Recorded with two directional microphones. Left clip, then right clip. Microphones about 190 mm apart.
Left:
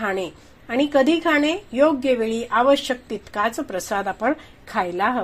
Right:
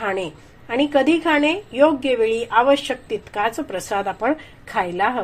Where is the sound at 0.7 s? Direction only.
25° left (ahead or behind).